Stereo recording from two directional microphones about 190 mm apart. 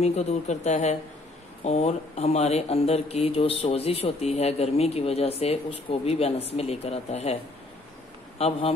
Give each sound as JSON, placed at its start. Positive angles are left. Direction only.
{"t": 0.0, "sound": "speech", "side_deg": 35}
{"t": 8.4, "sound": "speech", "side_deg": 30}